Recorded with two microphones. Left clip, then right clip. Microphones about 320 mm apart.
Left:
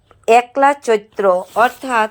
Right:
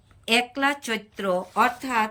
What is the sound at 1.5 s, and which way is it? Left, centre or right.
Speech, centre.